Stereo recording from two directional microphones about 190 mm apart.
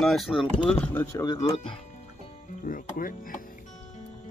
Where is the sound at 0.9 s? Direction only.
15° left (ahead or behind).